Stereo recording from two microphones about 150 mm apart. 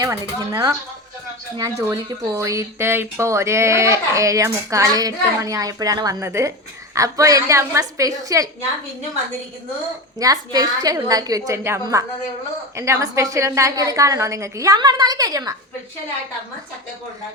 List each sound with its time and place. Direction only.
0.0 s speech: 20° right (ahead or behind)
10.2 s speech: 25° right (ahead or behind)